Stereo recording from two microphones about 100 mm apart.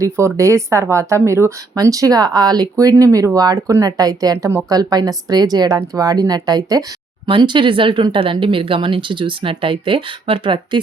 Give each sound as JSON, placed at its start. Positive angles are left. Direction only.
{"t": 0.0, "sound": "speech", "side_deg": -30}
{"t": 7.3, "sound": "speech", "side_deg": -50}